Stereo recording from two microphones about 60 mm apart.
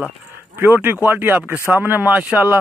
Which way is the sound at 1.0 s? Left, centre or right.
Right.